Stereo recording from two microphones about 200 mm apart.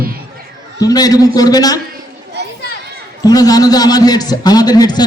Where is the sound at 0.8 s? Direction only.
20° left (ahead or behind).